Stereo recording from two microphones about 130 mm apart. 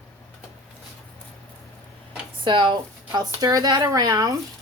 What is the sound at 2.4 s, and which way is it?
Speech, 40° right (ahead or behind).